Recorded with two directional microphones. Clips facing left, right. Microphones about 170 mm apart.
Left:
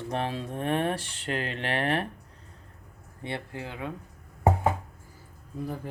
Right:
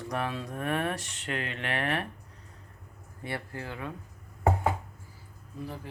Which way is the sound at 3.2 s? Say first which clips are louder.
Left 1 dB; 20° left (ahead or behind).